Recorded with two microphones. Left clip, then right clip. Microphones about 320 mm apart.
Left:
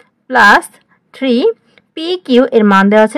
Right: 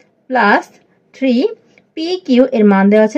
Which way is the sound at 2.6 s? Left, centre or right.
Left.